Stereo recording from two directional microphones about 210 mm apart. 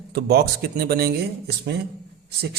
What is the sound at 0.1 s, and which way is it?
A man's voice, 50° right (ahead or behind).